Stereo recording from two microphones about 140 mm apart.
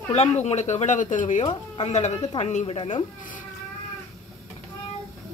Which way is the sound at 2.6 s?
40° left (ahead or behind).